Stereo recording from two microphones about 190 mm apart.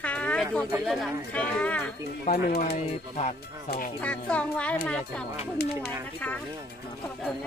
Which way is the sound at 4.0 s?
5° left (ahead or behind).